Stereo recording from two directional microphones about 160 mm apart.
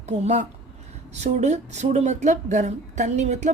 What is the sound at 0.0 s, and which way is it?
A woman's voice, 45° right (ahead or behind).